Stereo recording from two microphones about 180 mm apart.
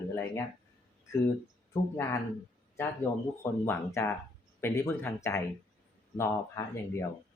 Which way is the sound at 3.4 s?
15° left (ahead or behind).